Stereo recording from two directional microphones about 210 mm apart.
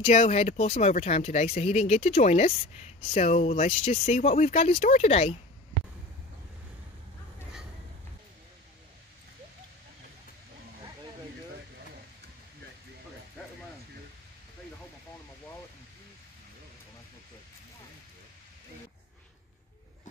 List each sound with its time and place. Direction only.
0.0 s speech: 35° left (ahead or behind)